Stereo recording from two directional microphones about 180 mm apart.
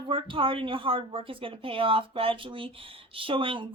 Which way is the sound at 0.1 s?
30° right (ahead or behind).